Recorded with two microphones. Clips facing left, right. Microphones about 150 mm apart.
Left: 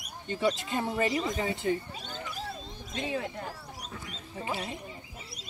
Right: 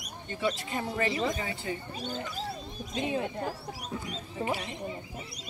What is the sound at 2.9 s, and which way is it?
Speech, 20° right (ahead or behind).